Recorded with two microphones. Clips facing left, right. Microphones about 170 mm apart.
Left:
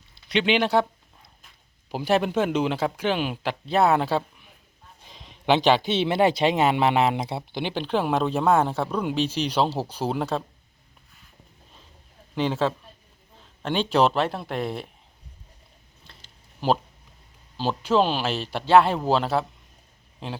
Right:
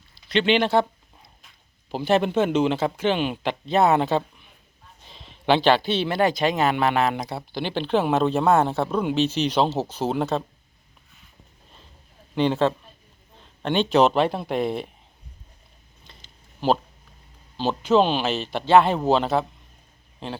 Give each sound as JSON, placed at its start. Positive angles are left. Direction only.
{"t": 0.3, "sound": "speech", "side_deg": 10}
{"t": 1.9, "sound": "speech", "side_deg": 10}
{"t": 8.9, "sound": "speech", "side_deg": -5}
{"t": 9.1, "sound": "speech", "side_deg": 10}
{"t": 12.3, "sound": "speech", "side_deg": 5}
{"t": 17.6, "sound": "speech", "side_deg": 5}